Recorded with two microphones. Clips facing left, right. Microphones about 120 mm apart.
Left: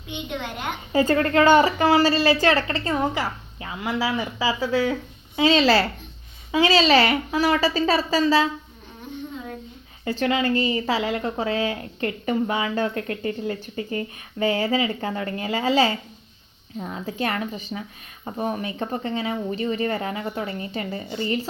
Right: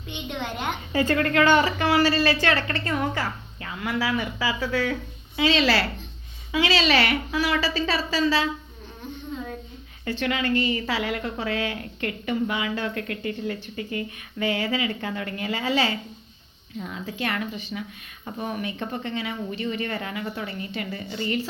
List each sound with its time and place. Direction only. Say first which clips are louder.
0.1 s a child's voice: left 1 dB; centre (ahead or behind)
0.9 s a woman's voice: left 3 dB; 30° left (ahead or behind)
2.9 s a woman's voice: left 3 dB; 20° left (ahead or behind)
5.5 s a woman's voice: left 4 dB; 40° left (ahead or behind)
10.2 s speech: left 3 dB; 30° left (ahead or behind)
15.7 s speech: left 5 dB; 35° left (ahead or behind)